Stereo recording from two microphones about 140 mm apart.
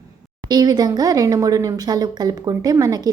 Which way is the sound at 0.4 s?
30° right (ahead or behind).